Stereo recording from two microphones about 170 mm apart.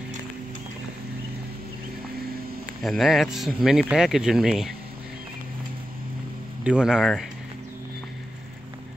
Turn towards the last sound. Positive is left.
turn(degrees=0)  # may be behind; listen again after turning